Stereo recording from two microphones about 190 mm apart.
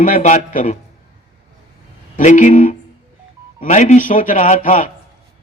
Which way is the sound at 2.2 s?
40° left (ahead or behind).